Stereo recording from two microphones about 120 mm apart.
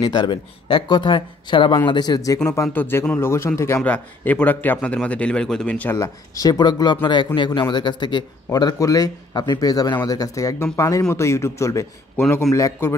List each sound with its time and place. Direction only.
0.0 s a man's voice: 40° left (ahead or behind); by 5.9 s 10° left (ahead or behind)
5.9 s a man's voice: 30° left (ahead or behind)